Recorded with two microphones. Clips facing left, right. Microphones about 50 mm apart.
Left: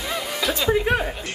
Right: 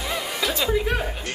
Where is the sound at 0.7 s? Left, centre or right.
Left.